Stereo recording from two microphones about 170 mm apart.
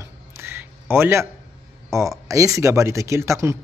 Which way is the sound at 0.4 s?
15° right (ahead or behind).